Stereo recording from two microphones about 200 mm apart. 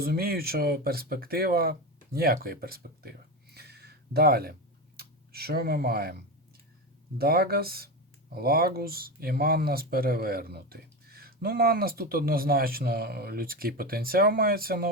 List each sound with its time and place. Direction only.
0.0 s speech: 50° right (ahead or behind)